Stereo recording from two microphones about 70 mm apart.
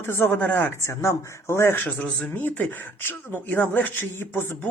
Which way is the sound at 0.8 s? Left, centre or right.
Left.